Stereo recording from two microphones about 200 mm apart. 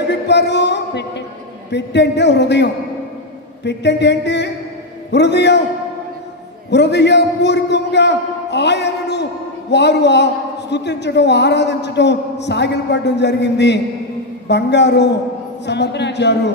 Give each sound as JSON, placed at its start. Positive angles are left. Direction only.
{"t": 0.1, "sound": "music", "side_deg": 60}
{"t": 1.7, "sound": "a man's voice", "side_deg": 60}
{"t": 6.7, "sound": "a man's voice", "side_deg": 60}